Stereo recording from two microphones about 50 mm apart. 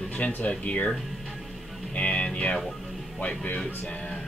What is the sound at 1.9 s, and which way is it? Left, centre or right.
Speech, left.